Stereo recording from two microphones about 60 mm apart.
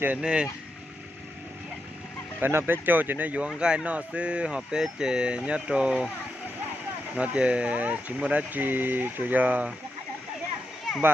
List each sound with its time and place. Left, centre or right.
0.2 s speech: centre
2.4 s speech: right
3.4 s speech: centre
7.2 s speech: centre